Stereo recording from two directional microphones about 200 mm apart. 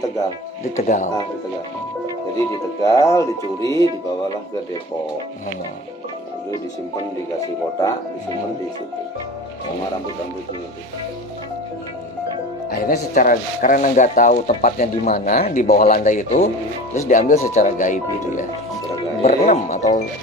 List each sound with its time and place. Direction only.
0.7 s speech: 40° left (ahead or behind)
2.8 s speech: 15° left (ahead or behind)
12.8 s speech: 45° left (ahead or behind)